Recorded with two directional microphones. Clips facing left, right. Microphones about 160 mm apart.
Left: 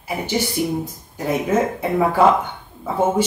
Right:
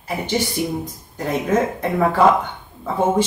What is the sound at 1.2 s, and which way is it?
Speech, 10° left (ahead or behind).